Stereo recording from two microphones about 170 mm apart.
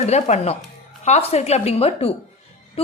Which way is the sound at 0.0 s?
40° left (ahead or behind).